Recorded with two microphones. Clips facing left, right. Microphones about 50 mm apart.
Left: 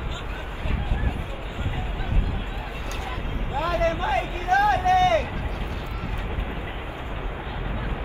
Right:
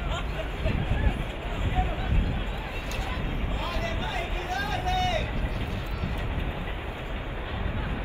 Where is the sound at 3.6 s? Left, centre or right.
Left.